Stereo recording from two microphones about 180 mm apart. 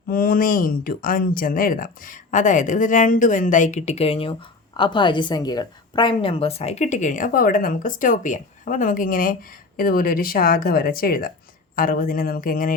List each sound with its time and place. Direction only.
0.1 s a woman's voice: 55° left (ahead or behind)